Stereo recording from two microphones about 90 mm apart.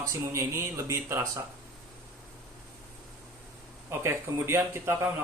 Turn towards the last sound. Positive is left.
turn(degrees=-30)  # may be behind; listen again after turning